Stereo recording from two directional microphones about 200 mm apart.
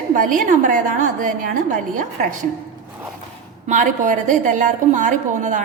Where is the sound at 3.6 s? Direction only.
40° right (ahead or behind).